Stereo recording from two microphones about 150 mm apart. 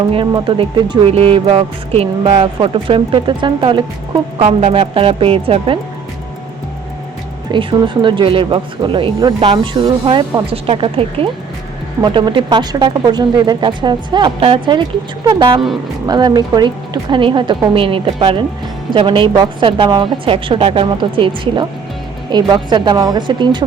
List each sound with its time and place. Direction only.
0.1 s speech: 35° right (ahead or behind)
4.4 s speech: 50° right (ahead or behind)
7.5 s speech: 30° right (ahead or behind)